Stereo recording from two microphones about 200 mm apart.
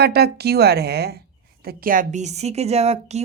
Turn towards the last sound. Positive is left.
turn(degrees=-35)  # may be behind; listen again after turning